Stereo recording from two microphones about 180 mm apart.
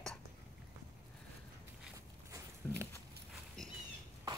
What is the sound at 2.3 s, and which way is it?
Walk, 15° right (ahead or behind).